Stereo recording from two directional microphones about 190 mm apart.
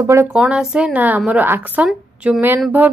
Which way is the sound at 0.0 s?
15° right (ahead or behind).